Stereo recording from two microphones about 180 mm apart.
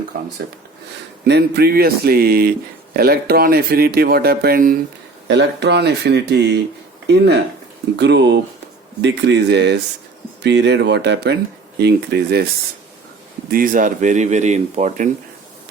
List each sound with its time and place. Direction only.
1.2 s speech: 65° right (ahead or behind)
5.3 s speech: 75° right (ahead or behind)
13.5 s speech: 50° right (ahead or behind)